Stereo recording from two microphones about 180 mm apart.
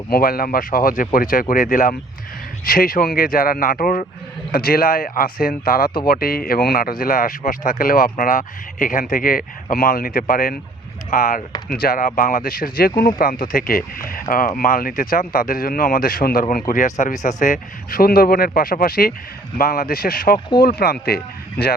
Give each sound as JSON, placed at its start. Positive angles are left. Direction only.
{"t": 0.1, "sound": "speech", "side_deg": 55}